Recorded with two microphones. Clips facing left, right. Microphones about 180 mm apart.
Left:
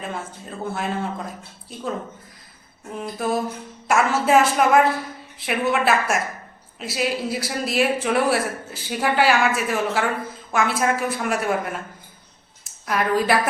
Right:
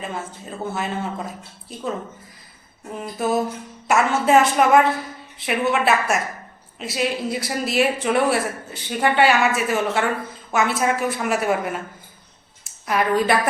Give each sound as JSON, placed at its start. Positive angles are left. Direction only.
{"t": 0.0, "sound": "speech", "side_deg": 0}
{"t": 3.0, "sound": "speech", "side_deg": 0}
{"t": 12.8, "sound": "speech", "side_deg": 0}